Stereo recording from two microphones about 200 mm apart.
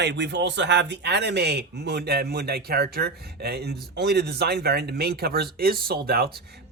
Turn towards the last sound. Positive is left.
turn(degrees=-50)  # may be behind; listen again after turning